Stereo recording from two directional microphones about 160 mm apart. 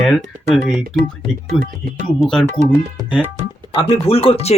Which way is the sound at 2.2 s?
5° left (ahead or behind).